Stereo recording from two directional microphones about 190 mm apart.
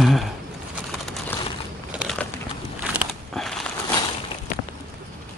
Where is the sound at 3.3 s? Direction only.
5° left (ahead or behind).